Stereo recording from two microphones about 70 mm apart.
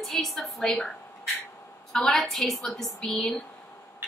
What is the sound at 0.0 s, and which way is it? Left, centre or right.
A woman's voice, centre.